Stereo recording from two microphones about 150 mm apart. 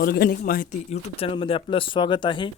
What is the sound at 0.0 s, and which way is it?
Speech, 90° left.